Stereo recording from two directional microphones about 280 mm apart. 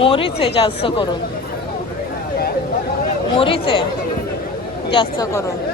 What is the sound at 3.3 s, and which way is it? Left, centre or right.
Speech, centre.